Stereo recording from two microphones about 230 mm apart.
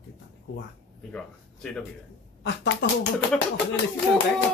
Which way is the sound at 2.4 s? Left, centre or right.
Left.